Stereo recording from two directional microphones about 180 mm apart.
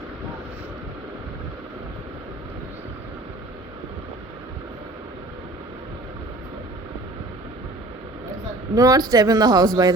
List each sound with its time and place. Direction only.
8.7 s speech: 20° right (ahead or behind)